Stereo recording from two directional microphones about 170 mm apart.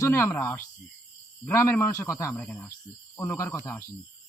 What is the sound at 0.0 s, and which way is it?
A man's voice, 15° left (ahead or behind).